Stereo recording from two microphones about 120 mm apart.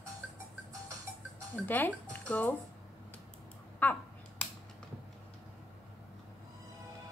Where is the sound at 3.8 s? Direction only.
15° left (ahead or behind).